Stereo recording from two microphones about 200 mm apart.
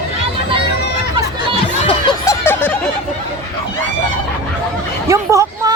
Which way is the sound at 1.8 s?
20° left (ahead or behind).